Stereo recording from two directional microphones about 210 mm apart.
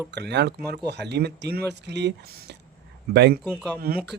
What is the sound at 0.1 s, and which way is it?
Speech, 55° right (ahead or behind).